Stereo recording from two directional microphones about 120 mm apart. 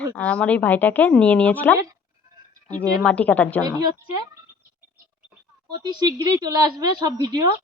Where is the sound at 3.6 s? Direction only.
35° right (ahead or behind).